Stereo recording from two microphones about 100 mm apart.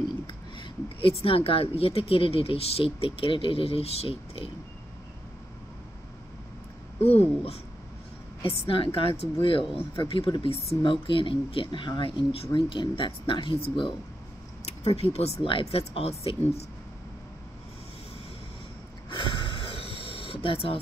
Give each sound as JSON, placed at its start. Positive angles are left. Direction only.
{"t": 0.6, "sound": "speech", "side_deg": 65}
{"t": 7.0, "sound": "speech", "side_deg": 90}
{"t": 8.6, "sound": "speech", "side_deg": 65}
{"t": 10.8, "sound": "speech", "side_deg": 55}
{"t": 14.8, "sound": "speech", "side_deg": 85}
{"t": 19.0, "sound": "a sound", "side_deg": 55}